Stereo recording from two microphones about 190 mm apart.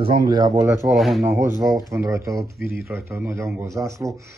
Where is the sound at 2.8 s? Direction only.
15° right (ahead or behind).